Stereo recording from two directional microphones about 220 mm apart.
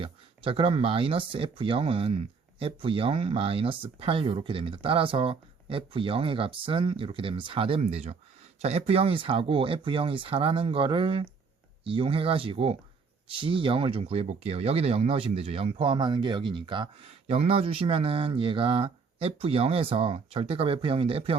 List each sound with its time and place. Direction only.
0.0 s speech: 25° right (ahead or behind)